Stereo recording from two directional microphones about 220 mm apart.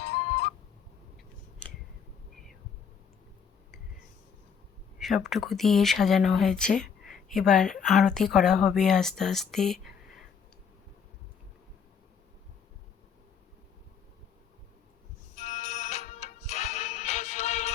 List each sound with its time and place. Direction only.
0.0 s music: 30° left (ahead or behind)
4.9 s speech: centre (ahead or behind)
15.4 s music: 30° left (ahead or behind)